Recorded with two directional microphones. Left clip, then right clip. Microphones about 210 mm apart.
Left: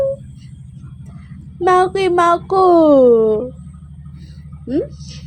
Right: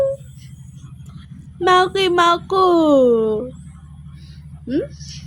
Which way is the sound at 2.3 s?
20° right (ahead or behind).